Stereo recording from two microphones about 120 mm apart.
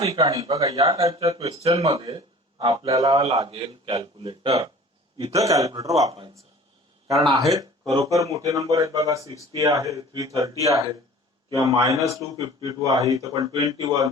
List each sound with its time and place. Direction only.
0.3 s speech: 30° right (ahead or behind)
1.5 s speech: 60° right (ahead or behind)
1.9 s speech: 40° right (ahead or behind)
2.9 s speech: 30° right (ahead or behind)
3.4 s speech: 45° right (ahead or behind); by 5.9 s 25° right (ahead or behind)
7.5 s speech: 30° right (ahead or behind)